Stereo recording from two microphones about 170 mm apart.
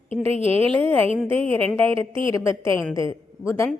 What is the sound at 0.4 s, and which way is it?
A woman's voice, 35° right (ahead or behind).